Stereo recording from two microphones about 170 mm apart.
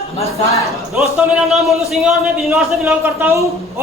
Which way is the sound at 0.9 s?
5° right (ahead or behind).